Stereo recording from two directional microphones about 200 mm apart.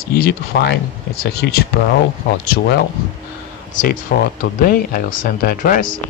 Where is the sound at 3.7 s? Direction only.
40° left (ahead or behind).